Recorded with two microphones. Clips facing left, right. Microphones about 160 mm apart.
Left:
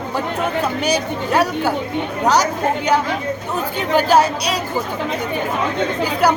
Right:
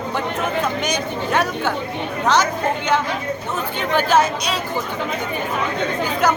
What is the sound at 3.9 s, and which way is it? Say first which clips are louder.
Speech: left 3 dB; 35° left (ahead or behind).